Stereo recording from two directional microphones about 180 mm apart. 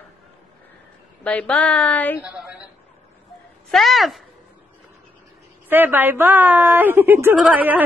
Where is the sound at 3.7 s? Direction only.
Centre (ahead or behind).